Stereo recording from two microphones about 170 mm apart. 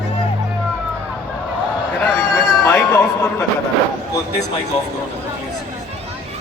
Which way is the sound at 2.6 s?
15° left (ahead or behind).